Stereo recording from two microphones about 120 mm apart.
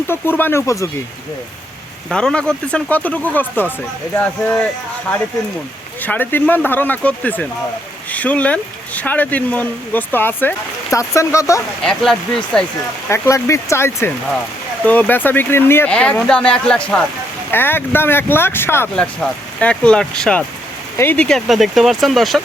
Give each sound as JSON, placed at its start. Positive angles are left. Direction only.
{"t": 0.1, "sound": "speech", "side_deg": 15}
{"t": 2.0, "sound": "speech", "side_deg": 5}
{"t": 6.0, "sound": "speech", "side_deg": 15}
{"t": 11.8, "sound": "speech", "side_deg": 5}
{"t": 13.1, "sound": "speech", "side_deg": 25}
{"t": 18.9, "sound": "speech", "side_deg": 10}
{"t": 21.0, "sound": "speech", "side_deg": 15}
{"t": 21.2, "sound": "speech", "side_deg": 0}